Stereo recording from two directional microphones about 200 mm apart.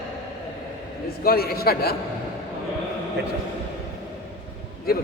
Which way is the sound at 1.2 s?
50° left (ahead or behind).